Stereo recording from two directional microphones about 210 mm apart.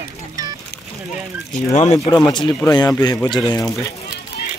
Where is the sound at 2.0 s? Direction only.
15° left (ahead or behind).